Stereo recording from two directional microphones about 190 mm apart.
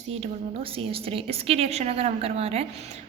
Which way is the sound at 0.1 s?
30° right (ahead or behind).